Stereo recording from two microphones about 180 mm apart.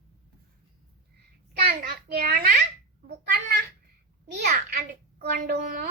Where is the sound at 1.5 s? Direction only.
60° right (ahead or behind).